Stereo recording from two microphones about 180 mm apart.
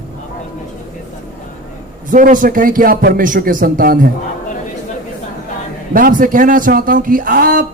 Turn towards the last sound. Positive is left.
turn(degrees=-50)  # may be behind; listen again after turning